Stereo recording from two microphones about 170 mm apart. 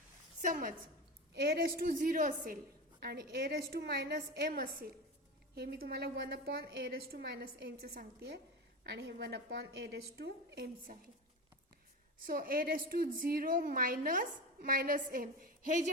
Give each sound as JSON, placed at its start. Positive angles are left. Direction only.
{"t": 0.4, "sound": "a woman's voice", "side_deg": -50}
{"t": 1.3, "sound": "a woman's voice", "side_deg": -70}
{"t": 3.0, "sound": "a woman's voice", "side_deg": -70}
{"t": 12.2, "sound": "a woman's voice", "side_deg": -60}